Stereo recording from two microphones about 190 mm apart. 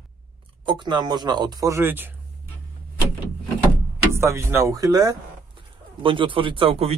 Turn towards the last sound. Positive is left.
turn(degrees=-30)  # may be behind; listen again after turning